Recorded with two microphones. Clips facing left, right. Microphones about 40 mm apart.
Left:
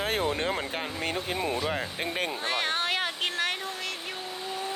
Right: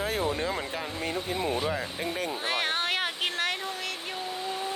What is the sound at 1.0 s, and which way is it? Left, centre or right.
Speech, left.